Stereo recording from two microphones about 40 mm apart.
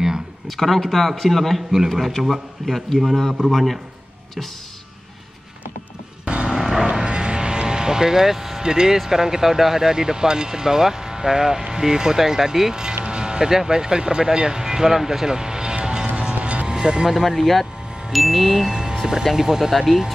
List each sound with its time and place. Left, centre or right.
0.5 s speech: centre
6.2 s vehicle: right
6.6 s a sound: centre
7.1 s speech: right
16.2 s vehicle: right
16.7 s speech: centre
17.2 s speech: centre
18.7 s vehicle: centre
19.2 s speech: centre